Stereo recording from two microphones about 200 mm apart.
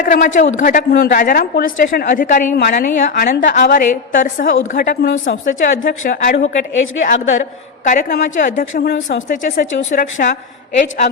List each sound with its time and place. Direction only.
0.0 s a woman's voice: 40° left (ahead or behind)
5.0 s a woman's voice: 65° left (ahead or behind)
5.5 s a woman's voice: 40° left (ahead or behind)